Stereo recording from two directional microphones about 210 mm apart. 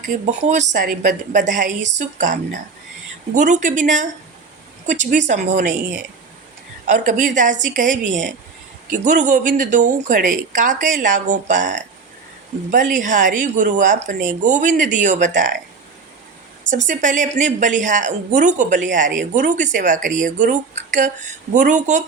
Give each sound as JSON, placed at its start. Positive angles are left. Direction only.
{"t": 0.3, "sound": "a woman's voice", "side_deg": -35}
{"t": 6.8, "sound": "a woman's voice", "side_deg": -35}
{"t": 12.7, "sound": "a woman's voice", "side_deg": -35}
{"t": 16.7, "sound": "a woman's voice", "side_deg": -35}